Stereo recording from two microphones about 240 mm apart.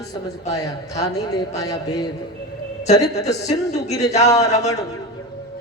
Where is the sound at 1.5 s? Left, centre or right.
Centre.